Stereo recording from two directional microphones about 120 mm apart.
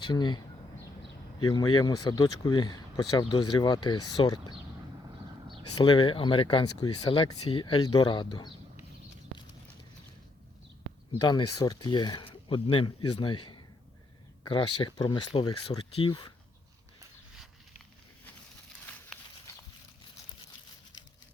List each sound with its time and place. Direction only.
0.0 s speech: 40° left (ahead or behind)
1.5 s speech: 35° left (ahead or behind)
5.1 s a sound: 45° right (ahead or behind)
5.8 s speech: 45° left (ahead or behind)
11.1 s speech: 35° left (ahead or behind)